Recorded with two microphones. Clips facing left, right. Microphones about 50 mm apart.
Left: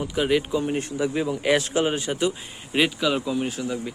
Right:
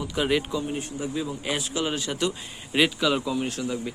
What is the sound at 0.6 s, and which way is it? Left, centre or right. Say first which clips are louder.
Speech: left 5 dB; left.